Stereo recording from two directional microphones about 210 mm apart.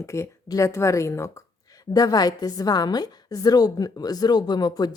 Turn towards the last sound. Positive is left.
turn(degrees=20)  # may be behind; listen again after turning